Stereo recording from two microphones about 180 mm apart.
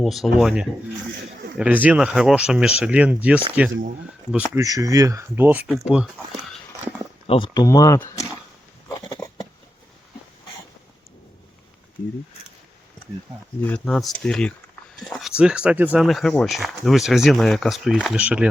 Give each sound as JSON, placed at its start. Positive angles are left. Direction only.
{"t": 0.0, "sound": "speech", "side_deg": 0}
{"t": 4.6, "sound": "speech", "side_deg": -20}
{"t": 7.3, "sound": "speech", "side_deg": 30}
{"t": 9.0, "sound": "a sound", "side_deg": 20}
{"t": 13.6, "sound": "speech", "side_deg": 10}